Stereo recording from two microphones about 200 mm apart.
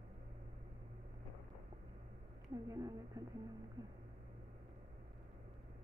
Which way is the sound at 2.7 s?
15° right (ahead or behind).